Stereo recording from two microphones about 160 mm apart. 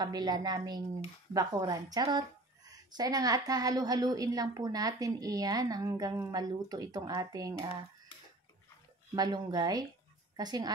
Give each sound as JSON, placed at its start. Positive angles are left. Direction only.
{"t": 0.0, "sound": "a woman's voice", "side_deg": -25}
{"t": 9.1, "sound": "a woman's voice", "side_deg": -25}